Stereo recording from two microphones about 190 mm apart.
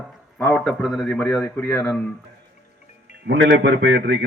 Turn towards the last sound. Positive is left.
turn(degrees=-75)  # may be behind; listen again after turning